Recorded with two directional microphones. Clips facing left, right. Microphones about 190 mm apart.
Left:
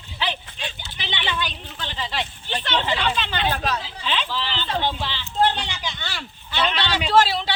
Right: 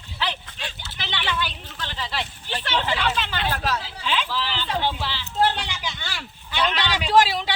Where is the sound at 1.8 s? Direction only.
25° left (ahead or behind).